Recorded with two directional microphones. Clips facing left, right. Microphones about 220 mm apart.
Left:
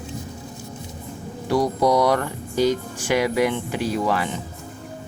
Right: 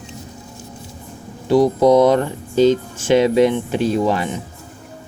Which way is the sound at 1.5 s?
20° right (ahead or behind).